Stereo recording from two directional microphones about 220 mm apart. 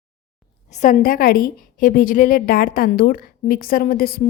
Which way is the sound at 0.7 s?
35° left (ahead or behind).